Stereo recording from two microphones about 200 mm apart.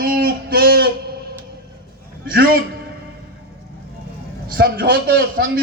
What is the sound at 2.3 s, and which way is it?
Speech, 45° right (ahead or behind).